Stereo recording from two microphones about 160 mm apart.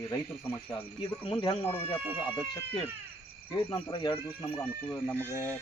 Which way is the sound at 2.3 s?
15° left (ahead or behind).